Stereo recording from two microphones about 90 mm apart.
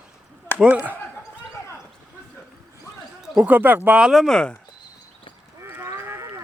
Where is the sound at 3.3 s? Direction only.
20° right (ahead or behind).